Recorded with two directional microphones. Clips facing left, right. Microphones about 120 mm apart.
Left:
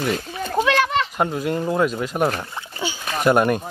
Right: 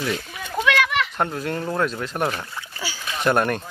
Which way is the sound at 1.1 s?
10° left (ahead or behind).